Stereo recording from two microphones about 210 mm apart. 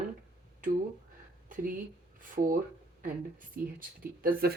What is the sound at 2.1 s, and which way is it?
Speech, 40° right (ahead or behind).